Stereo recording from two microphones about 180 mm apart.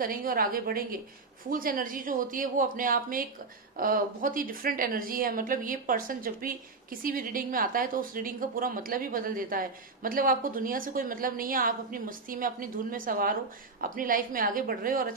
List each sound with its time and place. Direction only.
0.0 s a woman's voice: 50° right (ahead or behind)